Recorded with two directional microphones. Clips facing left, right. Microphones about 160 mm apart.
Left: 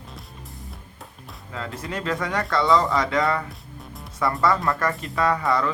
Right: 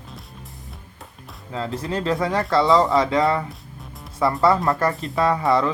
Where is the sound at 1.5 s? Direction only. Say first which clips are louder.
Right 5 dB; 30° right (ahead or behind).